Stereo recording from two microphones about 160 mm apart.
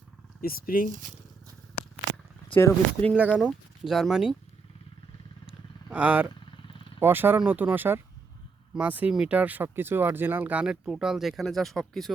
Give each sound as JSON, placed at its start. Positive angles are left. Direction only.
{"t": 0.4, "sound": "speech", "side_deg": 65}
{"t": 2.6, "sound": "speech", "side_deg": 15}
{"t": 3.3, "sound": "speech", "side_deg": -5}
{"t": 5.9, "sound": "speech", "side_deg": -10}